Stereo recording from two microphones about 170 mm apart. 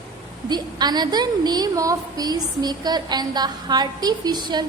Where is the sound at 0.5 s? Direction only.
25° right (ahead or behind).